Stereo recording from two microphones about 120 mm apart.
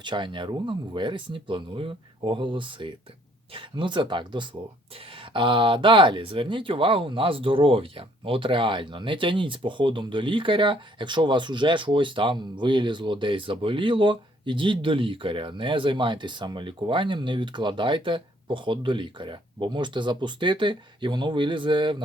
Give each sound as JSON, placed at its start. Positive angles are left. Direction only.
{"t": 0.0, "sound": "speech", "side_deg": -40}